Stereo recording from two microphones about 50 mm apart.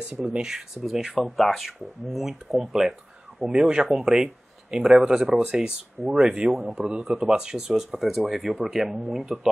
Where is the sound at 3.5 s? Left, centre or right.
Centre.